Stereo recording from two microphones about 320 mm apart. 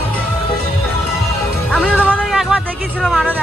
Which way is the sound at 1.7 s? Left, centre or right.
Centre.